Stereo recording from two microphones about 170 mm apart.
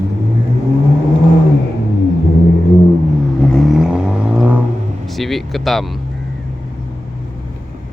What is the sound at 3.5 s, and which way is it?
Vehicle, centre (ahead or behind).